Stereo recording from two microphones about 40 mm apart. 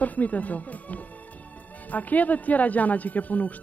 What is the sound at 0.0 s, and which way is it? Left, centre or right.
Speech, left.